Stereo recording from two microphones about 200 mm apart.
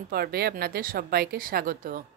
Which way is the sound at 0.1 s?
50° right (ahead or behind).